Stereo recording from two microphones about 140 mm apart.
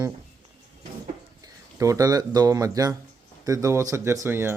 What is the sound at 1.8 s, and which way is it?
Speech, 25° right (ahead or behind).